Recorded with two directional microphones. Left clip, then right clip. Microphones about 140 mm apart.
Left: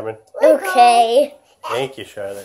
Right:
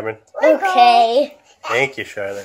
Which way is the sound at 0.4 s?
15° left (ahead or behind).